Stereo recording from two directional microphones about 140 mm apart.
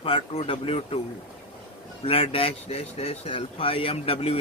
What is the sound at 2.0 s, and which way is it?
Speech, 40° left (ahead or behind).